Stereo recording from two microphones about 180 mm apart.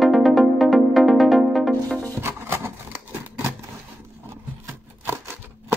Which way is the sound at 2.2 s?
15° right (ahead or behind).